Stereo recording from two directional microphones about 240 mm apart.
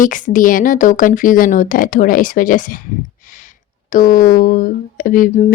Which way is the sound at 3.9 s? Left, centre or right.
Left.